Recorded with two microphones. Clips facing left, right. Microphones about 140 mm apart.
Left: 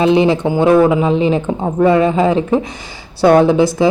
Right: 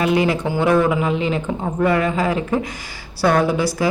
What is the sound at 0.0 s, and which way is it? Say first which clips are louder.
Speech: left 6 dB; 25° left (ahead or behind).